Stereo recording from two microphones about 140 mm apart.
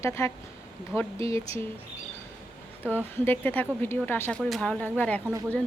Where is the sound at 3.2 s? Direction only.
15° left (ahead or behind).